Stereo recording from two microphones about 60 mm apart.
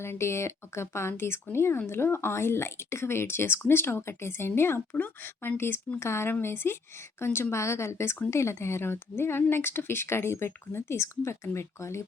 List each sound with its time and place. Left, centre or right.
0.0 s speech: left
6.0 s speech: left